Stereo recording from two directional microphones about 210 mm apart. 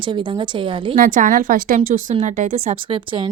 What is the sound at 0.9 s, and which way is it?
Speech, 40° right (ahead or behind).